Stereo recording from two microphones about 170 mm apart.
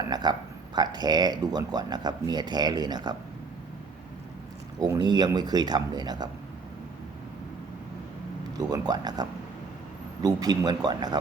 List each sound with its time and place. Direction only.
0.0 s speech: 25° right (ahead or behind)
4.8 s speech: 25° right (ahead or behind)
8.5 s speech: 25° right (ahead or behind)
10.2 s speech: 25° right (ahead or behind)